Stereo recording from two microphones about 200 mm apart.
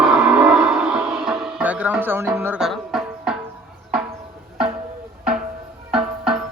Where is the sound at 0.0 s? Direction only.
5° right (ahead or behind).